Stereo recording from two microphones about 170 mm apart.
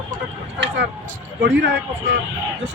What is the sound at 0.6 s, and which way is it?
Speech, 80° right.